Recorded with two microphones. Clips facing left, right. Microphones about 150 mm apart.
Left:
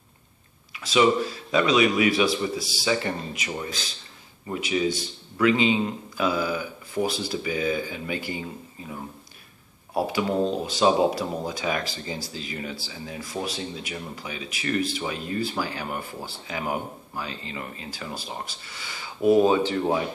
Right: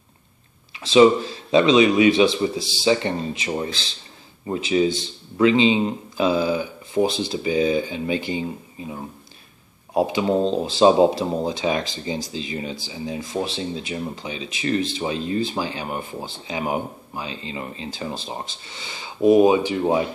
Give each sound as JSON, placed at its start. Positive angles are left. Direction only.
{"t": 0.7, "sound": "speech", "side_deg": -25}
{"t": 9.9, "sound": "speech", "side_deg": -20}